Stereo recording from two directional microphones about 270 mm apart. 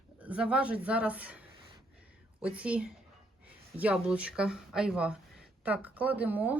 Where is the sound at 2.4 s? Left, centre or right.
Centre.